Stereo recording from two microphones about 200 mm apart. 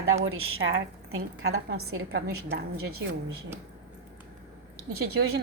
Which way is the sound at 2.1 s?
50° right (ahead or behind).